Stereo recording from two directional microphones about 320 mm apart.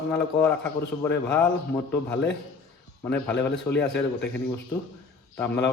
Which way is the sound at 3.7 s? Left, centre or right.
Left.